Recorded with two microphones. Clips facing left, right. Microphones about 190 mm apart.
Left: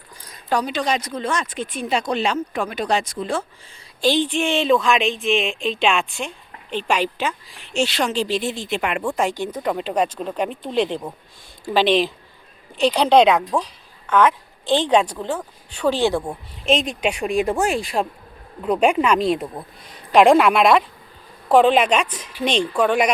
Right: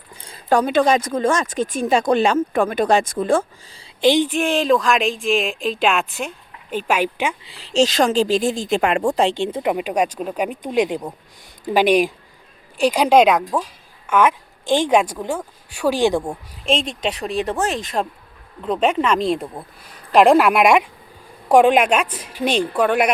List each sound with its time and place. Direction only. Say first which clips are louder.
0.5 s speech: right 6 dB; 50° right (ahead or behind)
4.0 s speech: right 3 dB; 15° right (ahead or behind)
4.3 s speech: right 1 dB; centre (ahead or behind)
7.9 s speech: right 5 dB; 45° right (ahead or behind); by 9.7 s 25° right (ahead or behind)
9.7 s a woman's voice: right 1 dB; 10° right (ahead or behind)
16.8 s speech: left 2 dB; 10° left (ahead or behind)
18.0 s speech: even; centre (ahead or behind)